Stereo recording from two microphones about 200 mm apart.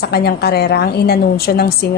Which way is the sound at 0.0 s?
55° left (ahead or behind).